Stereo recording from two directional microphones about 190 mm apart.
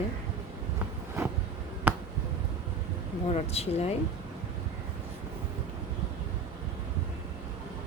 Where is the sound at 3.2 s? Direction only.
35° left (ahead or behind).